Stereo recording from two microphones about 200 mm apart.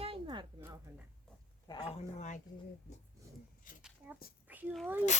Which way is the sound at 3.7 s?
40° left (ahead or behind).